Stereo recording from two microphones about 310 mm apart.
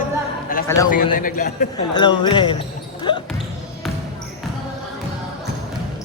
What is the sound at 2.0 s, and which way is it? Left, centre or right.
Speech, centre.